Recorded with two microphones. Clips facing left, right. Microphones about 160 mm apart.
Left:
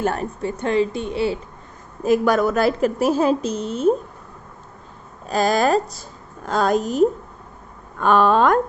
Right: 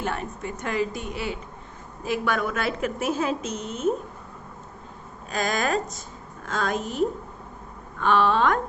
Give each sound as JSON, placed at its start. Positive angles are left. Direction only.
{"t": 0.0, "sound": "a woman's voice", "side_deg": 40}
{"t": 2.0, "sound": "a woman's voice", "side_deg": 40}
{"t": 5.3, "sound": "a woman's voice", "side_deg": 35}